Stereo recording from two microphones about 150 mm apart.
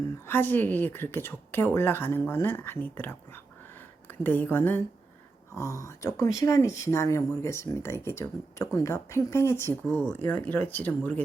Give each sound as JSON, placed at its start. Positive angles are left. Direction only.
{"t": 0.3, "sound": "a woman's voice", "side_deg": 15}
{"t": 4.2, "sound": "a woman's voice", "side_deg": 10}